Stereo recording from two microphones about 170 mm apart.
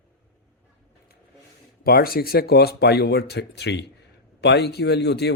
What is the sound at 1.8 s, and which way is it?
A man's voice, 60° left (ahead or behind).